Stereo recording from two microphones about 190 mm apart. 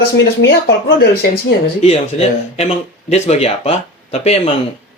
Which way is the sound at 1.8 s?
35° left (ahead or behind).